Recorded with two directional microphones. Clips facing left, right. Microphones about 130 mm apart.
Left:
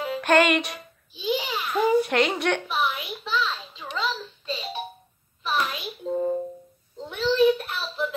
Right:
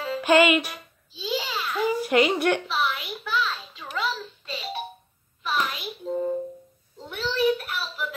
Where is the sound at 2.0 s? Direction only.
5° right (ahead or behind).